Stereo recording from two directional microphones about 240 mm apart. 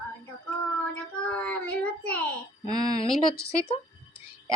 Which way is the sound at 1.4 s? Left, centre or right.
Centre.